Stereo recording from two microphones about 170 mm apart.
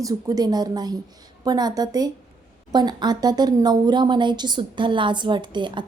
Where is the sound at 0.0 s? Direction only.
20° right (ahead or behind).